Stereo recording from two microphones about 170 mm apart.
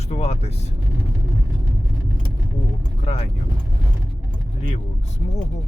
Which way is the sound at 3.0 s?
35° left (ahead or behind).